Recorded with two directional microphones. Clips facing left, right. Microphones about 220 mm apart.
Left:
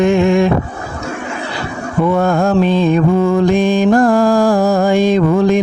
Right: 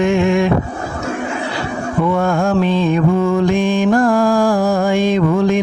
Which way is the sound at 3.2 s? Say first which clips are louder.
Left 3 dB; 35° left (ahead or behind).